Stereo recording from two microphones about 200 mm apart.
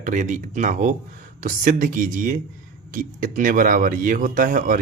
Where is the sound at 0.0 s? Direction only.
40° right (ahead or behind).